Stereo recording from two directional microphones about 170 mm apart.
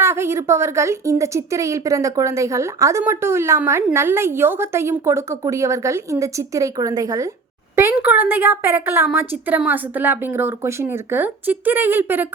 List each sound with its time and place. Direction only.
0.0 s speech: 15° right (ahead or behind)